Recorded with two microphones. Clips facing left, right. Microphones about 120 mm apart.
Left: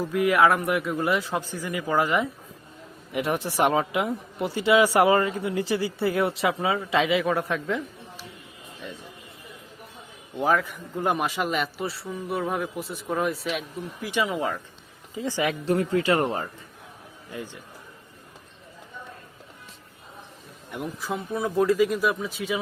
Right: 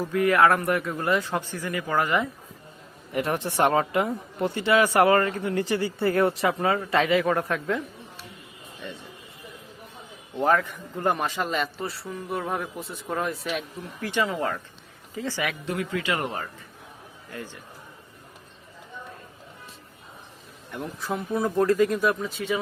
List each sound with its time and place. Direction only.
0.1 s speech: 15° left (ahead or behind)
0.4 s speech: centre (ahead or behind); by 2.3 s 15° left (ahead or behind)
3.1 s speech: 5° left (ahead or behind)
10.3 s speech: 5° left (ahead or behind); by 15.5 s 20° left (ahead or behind)
15.6 s speech: 35° left (ahead or behind)
17.3 s speech: 15° left (ahead or behind)
20.7 s speech: 15° left (ahead or behind)
21.0 s speech: centre (ahead or behind)